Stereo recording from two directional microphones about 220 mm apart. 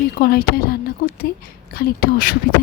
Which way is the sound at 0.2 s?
45° left (ahead or behind).